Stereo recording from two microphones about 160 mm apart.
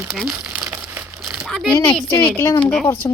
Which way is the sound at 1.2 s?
5° right (ahead or behind).